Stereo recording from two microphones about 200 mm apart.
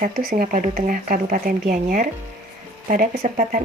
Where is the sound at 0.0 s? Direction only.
45° right (ahead or behind).